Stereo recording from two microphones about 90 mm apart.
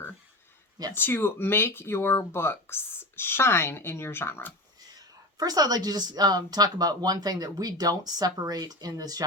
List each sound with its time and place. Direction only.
0.9 s speech: 25° left (ahead or behind)
4.9 s a woman's voice: 45° right (ahead or behind)